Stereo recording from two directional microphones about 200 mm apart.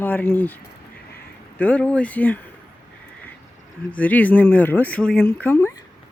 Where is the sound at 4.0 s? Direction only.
10° left (ahead or behind).